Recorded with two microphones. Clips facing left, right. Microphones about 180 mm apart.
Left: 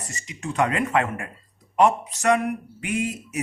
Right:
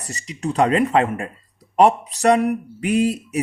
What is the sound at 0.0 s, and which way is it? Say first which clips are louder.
Speech: right 7 dB; 35° right (ahead or behind).